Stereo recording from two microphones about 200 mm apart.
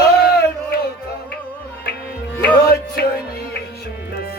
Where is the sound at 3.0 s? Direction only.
50° left (ahead or behind).